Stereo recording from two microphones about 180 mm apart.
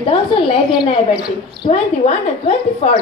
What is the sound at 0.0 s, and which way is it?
A woman's voice, 30° left (ahead or behind).